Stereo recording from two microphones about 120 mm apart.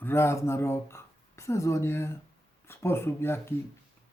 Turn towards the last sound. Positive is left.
turn(degrees=20)  # may be behind; listen again after turning